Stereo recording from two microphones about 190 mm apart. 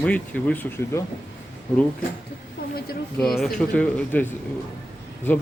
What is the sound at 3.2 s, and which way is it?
Speech, centre (ahead or behind).